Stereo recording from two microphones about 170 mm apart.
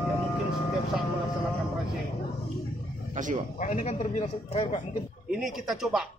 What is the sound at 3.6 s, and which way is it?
Speech, 45° left (ahead or behind).